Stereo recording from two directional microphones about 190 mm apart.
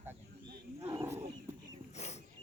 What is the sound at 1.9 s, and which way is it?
Wild animals, 35° left (ahead or behind).